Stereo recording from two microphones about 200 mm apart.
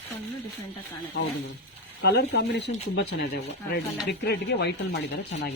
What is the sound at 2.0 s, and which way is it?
Speech, 55° left (ahead or behind).